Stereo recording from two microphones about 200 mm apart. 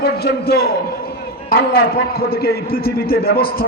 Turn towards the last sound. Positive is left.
turn(degrees=50)  # may be behind; listen again after turning